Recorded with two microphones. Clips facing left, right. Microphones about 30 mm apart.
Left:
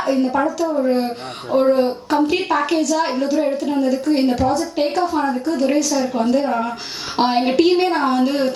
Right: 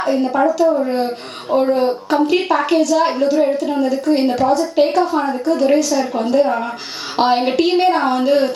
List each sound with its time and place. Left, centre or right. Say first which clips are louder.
0.0 s speech: right 2 dB; centre